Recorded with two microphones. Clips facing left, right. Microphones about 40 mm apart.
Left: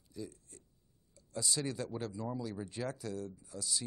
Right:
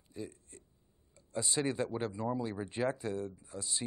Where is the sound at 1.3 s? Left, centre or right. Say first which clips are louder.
Right 4 dB; right.